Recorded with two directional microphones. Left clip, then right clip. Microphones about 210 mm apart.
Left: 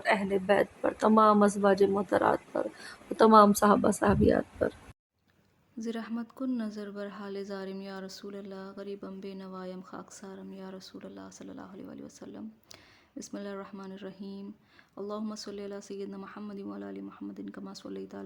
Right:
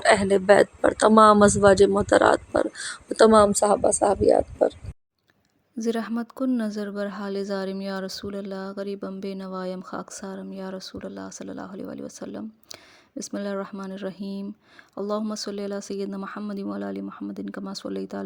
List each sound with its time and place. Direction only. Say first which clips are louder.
0.0 s speech: right 9 dB; 30° right (ahead or behind); by 4.7 s 15° right (ahead or behind)
5.7 s speech: right 10 dB; 35° right (ahead or behind)